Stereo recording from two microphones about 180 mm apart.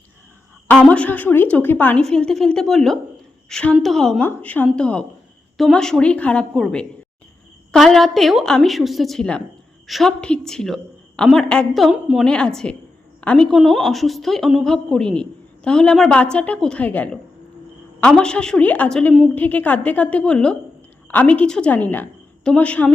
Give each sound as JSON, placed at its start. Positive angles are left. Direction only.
{"t": 0.9, "sound": "a woman's voice", "side_deg": 10}